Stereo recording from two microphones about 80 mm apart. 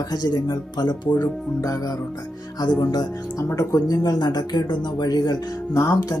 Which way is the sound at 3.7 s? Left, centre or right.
Left.